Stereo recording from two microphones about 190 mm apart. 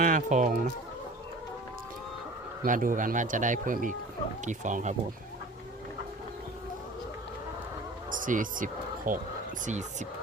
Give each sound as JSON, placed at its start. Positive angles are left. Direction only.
{"t": 0.0, "sound": "speech", "side_deg": -45}
{"t": 2.6, "sound": "speech", "side_deg": -45}
{"t": 8.1, "sound": "speech", "side_deg": -45}